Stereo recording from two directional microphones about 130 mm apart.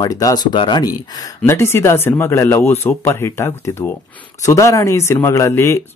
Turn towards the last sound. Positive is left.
turn(degrees=20)  # may be behind; listen again after turning